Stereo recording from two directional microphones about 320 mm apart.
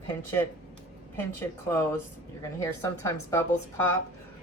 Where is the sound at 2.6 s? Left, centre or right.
Centre.